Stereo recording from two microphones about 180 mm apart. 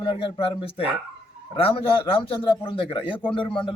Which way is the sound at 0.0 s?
30° left (ahead or behind).